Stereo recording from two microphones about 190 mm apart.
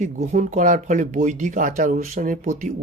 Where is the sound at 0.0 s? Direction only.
40° right (ahead or behind).